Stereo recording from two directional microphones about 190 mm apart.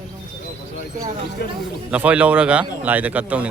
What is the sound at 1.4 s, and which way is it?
Speech, 55° left (ahead or behind).